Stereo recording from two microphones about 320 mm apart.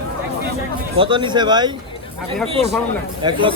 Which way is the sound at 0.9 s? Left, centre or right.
Centre.